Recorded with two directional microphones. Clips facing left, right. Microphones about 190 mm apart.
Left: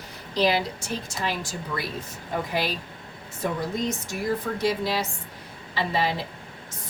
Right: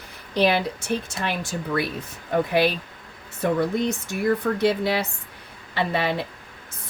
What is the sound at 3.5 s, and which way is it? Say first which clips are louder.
A woman's voice: right 5 dB; 60° right (ahead or behind).